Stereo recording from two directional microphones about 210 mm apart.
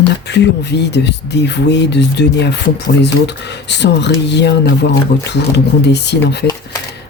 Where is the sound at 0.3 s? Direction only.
55° left (ahead or behind).